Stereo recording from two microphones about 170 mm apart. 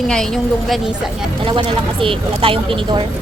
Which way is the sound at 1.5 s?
30° right (ahead or behind).